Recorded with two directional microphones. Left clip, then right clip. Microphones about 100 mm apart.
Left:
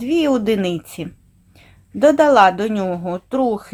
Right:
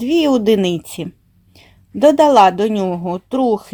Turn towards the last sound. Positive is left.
turn(degrees=-35)  # may be behind; listen again after turning